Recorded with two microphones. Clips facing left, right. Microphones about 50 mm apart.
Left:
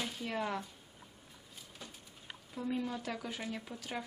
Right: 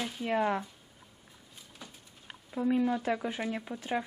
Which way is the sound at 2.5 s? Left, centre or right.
Right.